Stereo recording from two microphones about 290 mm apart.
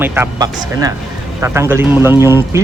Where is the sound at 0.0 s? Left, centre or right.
Centre.